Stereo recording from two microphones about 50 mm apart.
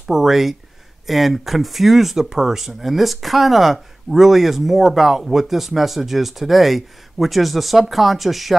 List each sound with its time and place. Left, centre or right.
0.1 s speech: centre